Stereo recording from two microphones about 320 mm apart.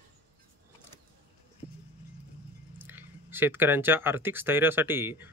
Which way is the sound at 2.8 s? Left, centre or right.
Centre.